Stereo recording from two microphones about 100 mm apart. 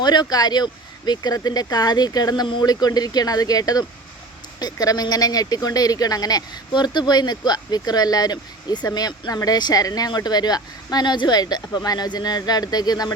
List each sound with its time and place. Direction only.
0.0 s speech: 45° left (ahead or behind)